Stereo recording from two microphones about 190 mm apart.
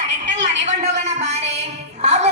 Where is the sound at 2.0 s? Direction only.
35° right (ahead or behind).